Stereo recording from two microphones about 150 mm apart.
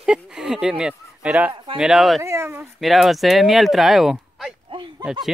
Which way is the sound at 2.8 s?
Centre (ahead or behind).